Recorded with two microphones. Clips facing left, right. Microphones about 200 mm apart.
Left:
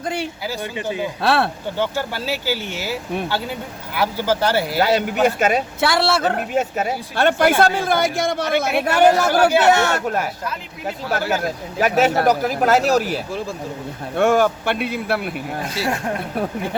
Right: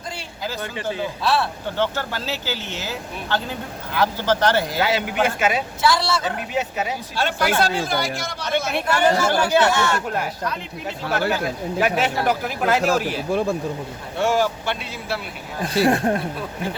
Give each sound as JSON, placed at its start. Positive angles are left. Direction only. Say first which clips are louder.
{"t": 0.0, "sound": "speech", "louder": "left 9 dB", "side_deg": 60}
{"t": 0.4, "sound": "speech", "louder": "left 2 dB", "side_deg": 15}
{"t": 1.2, "sound": "a man's voice", "louder": "left 3 dB", "side_deg": 60}
{"t": 1.8, "sound": "speech", "louder": "left 1 dB", "side_deg": 10}
{"t": 4.8, "sound": "speech", "louder": "left 4 dB", "side_deg": 45}
{"t": 5.8, "sound": "a man's voice", "louder": "left 2 dB", "side_deg": 60}
{"t": 11.8, "sound": "speech", "louder": "left 5 dB", "side_deg": 40}
{"t": 14.2, "sound": "a man's voice", "louder": "left 4 dB", "side_deg": 55}
{"t": 15.9, "sound": "speech", "louder": "right 3 dB", "side_deg": -35}